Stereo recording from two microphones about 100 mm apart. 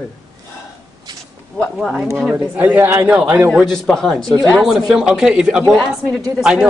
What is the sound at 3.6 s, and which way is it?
Speech, 5° left (ahead or behind).